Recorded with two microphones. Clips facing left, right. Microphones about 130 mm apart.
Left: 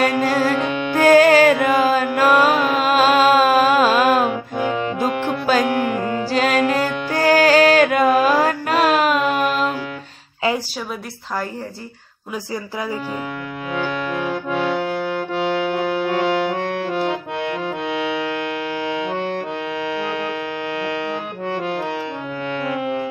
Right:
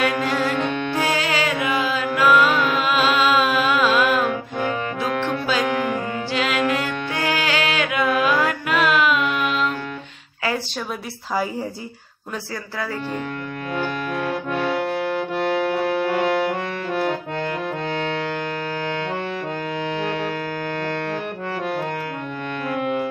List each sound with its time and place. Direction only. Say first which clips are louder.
0.0 s music: left 4 dB; 40° left (ahead or behind)
4.3 s saxophone: left 2 dB; 15° left (ahead or behind)
5.5 s music: left 5 dB; 45° left (ahead or behind)
14.5 s accordion: left 3 dB; centre (ahead or behind)